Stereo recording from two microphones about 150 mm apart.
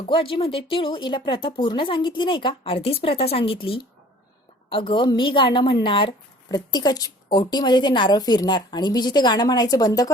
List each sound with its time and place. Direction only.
0.1 s a woman's voice: 35° left (ahead or behind)